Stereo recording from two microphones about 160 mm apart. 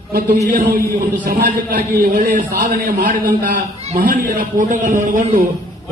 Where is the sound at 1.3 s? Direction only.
65° right (ahead or behind).